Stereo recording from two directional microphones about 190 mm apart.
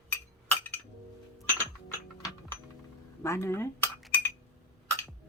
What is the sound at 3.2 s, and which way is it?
Speech, 15° left (ahead or behind).